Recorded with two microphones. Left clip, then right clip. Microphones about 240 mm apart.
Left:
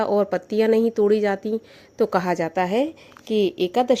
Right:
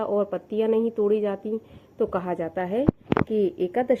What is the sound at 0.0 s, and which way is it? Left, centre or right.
A woman's voice, left.